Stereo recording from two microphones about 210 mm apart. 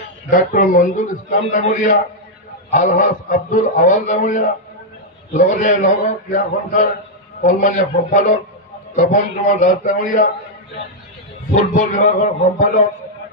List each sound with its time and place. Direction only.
0.3 s a man's voice: 40° left (ahead or behind)
11.5 s a man's voice: 35° left (ahead or behind)